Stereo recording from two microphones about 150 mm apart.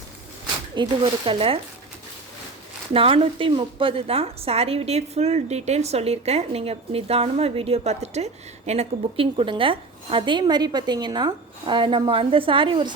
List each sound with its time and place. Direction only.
0.8 s a woman's voice: 35° right (ahead or behind)
2.9 s a woman's voice: 40° right (ahead or behind)